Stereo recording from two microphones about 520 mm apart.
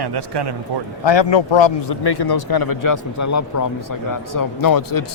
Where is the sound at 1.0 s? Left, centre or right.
Left.